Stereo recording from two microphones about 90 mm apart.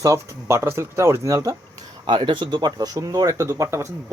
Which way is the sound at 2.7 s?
45° right (ahead or behind).